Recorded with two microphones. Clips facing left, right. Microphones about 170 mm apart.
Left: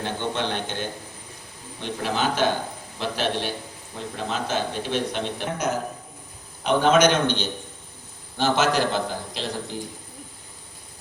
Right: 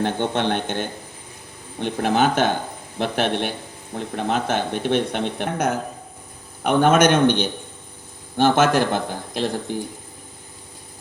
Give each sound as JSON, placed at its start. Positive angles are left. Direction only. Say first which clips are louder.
{"t": 0.0, "sound": "speech", "louder": "right 5 dB", "side_deg": -55}